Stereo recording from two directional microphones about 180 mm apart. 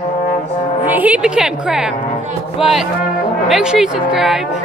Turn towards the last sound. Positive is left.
turn(degrees=0)  # may be behind; listen again after turning